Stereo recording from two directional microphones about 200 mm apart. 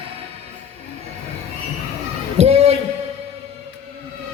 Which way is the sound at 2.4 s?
30° right (ahead or behind).